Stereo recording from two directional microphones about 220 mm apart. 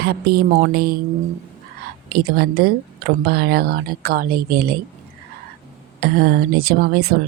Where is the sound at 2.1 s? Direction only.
45° right (ahead or behind).